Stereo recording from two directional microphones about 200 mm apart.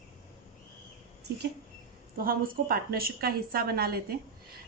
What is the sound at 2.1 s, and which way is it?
A woman's voice, 45° right (ahead or behind).